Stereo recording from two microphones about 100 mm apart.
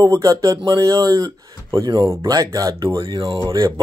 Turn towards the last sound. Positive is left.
turn(degrees=-60)  # may be behind; listen again after turning